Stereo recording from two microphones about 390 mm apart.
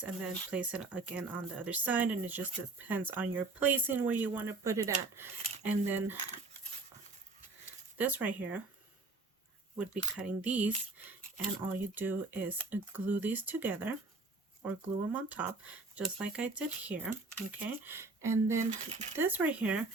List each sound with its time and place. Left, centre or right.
0.0 s speech: centre
7.9 s speech: centre
9.7 s speech: centre
15.1 s speech: centre
18.7 s speech: centre
19.1 s speech: centre